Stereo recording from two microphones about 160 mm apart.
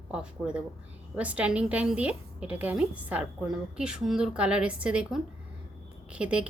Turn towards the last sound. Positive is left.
turn(degrees=-5)  # may be behind; listen again after turning